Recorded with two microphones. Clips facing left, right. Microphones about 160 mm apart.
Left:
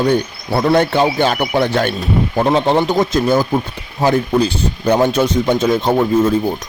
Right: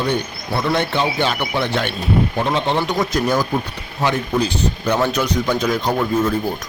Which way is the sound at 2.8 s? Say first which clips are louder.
Left 5 dB; 25° left (ahead or behind).